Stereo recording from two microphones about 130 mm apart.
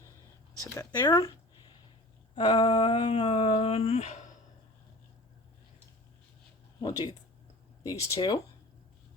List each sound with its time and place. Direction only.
0.6 s speech: 25° left (ahead or behind)
2.3 s a sound: 35° left (ahead or behind); by 4.3 s 60° left (ahead or behind)
6.8 s speech: 30° left (ahead or behind)